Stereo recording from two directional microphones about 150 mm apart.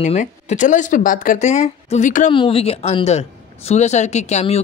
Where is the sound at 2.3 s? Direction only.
35° left (ahead or behind).